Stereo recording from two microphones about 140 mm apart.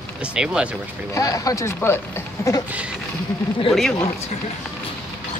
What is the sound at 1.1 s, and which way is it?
Speech, 25° left (ahead or behind).